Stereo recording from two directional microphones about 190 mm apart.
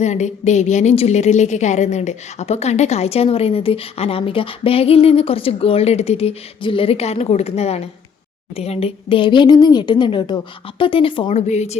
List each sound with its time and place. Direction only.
0.0 s a woman's voice: 35° left (ahead or behind)